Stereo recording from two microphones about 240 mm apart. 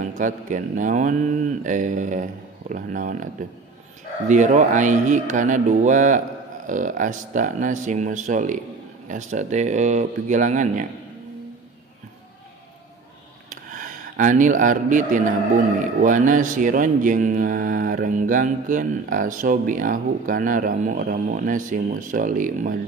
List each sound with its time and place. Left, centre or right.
0.0 s speech: right
4.3 s speech: right
13.5 s a sound: right
16.0 s speech: right